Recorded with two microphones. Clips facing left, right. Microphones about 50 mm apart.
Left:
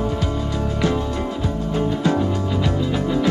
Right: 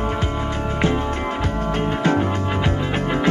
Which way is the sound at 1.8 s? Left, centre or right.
Right.